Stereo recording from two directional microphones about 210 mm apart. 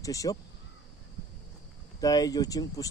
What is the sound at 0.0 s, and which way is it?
Speech, 15° left (ahead or behind).